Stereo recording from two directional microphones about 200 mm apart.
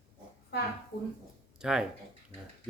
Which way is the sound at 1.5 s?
5° right (ahead or behind).